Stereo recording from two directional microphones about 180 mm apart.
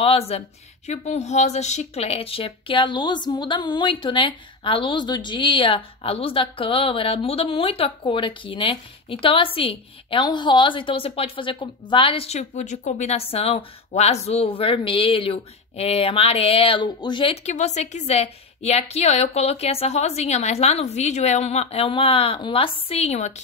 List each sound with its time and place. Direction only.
0.0 s speech: 35° left (ahead or behind)